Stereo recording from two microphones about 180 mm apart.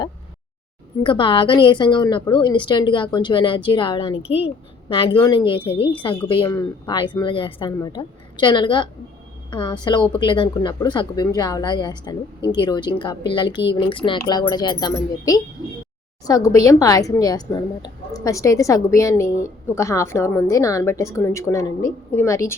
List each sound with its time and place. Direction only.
1.0 s a woman's voice: 30° left (ahead or behind)